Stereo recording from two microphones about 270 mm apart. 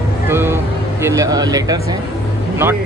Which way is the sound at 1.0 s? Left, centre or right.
Centre.